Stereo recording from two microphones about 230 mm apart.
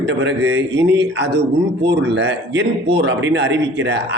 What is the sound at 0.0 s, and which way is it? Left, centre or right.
Speech, right.